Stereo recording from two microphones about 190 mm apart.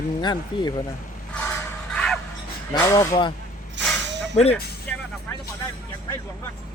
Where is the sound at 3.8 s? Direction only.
70° right (ahead or behind).